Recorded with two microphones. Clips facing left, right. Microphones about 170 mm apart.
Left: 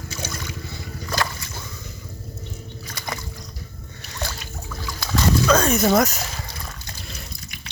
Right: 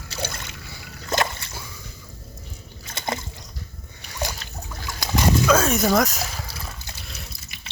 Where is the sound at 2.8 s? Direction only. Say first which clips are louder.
Right 5 dB; 25° right (ahead or behind).